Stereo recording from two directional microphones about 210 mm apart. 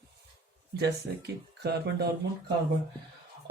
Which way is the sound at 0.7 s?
50° right (ahead or behind).